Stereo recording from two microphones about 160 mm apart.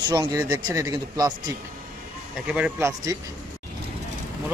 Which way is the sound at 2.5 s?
10° right (ahead or behind).